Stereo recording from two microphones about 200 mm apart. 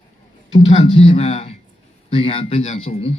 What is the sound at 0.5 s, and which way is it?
Speech, 30° left (ahead or behind).